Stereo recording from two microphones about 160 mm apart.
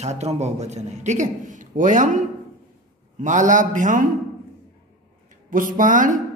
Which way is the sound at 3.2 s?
50° right (ahead or behind).